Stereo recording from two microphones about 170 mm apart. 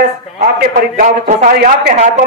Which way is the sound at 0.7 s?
55° right (ahead or behind).